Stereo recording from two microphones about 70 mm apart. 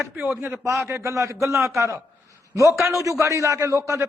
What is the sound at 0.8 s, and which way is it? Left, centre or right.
A man's voice, right.